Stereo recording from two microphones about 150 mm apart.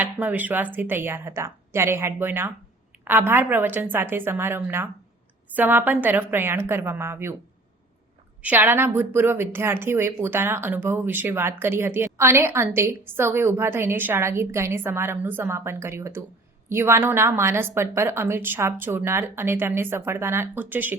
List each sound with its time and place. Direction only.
0.0 s a woman's voice: 10° right (ahead or behind)
8.4 s a woman's voice: 10° right (ahead or behind)